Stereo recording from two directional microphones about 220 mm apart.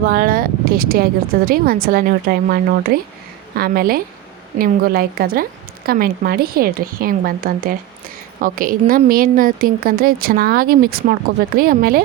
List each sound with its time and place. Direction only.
0.0 s a woman's voice: 40° right (ahead or behind)